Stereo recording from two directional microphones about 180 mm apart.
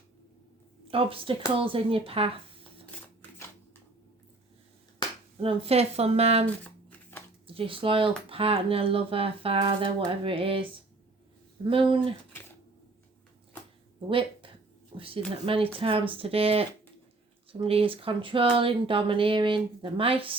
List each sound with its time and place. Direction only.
0.9 s speech: 30° right (ahead or behind)
3.2 s shuffling cards: 15° left (ahead or behind)
5.4 s speech: 30° right (ahead or behind)
6.7 s shuffling cards: 10° left (ahead or behind)
7.4 s speech: 30° right (ahead or behind)
11.7 s speech: 30° right (ahead or behind)
14.1 s speech: 30° right (ahead or behind)